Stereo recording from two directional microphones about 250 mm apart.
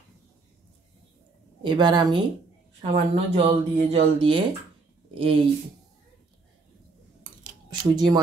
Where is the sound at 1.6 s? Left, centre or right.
Centre.